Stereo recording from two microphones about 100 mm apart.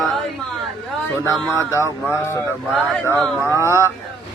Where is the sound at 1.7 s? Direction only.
30° right (ahead or behind).